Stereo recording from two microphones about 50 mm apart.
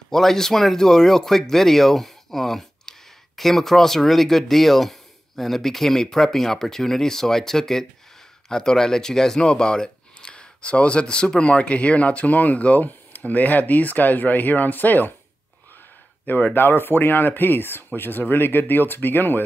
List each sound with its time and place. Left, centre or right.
0.1 s speech: centre; by 15.1 s left
16.3 s speech: left
16.5 s speech: left